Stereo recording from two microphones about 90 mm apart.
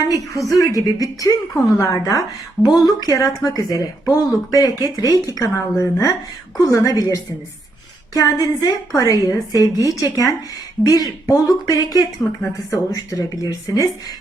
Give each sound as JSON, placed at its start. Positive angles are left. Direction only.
{"t": 0.1, "sound": "a woman's voice", "side_deg": 40}